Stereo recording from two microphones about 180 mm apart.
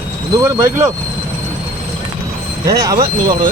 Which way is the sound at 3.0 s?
50° right (ahead or behind).